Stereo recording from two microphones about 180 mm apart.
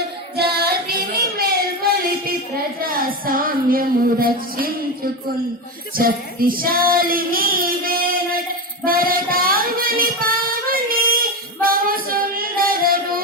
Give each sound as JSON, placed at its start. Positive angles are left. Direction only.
{"t": 0.3, "sound": "child singing", "side_deg": -60}
{"t": 2.8, "sound": "music", "side_deg": -55}
{"t": 6.0, "sound": "child singing", "side_deg": -55}